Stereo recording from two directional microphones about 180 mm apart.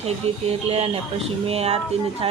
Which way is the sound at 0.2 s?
35° right (ahead or behind).